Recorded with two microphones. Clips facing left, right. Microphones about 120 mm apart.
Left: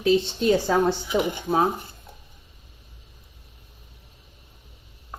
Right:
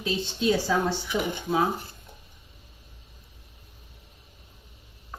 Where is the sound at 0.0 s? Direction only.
50° left (ahead or behind).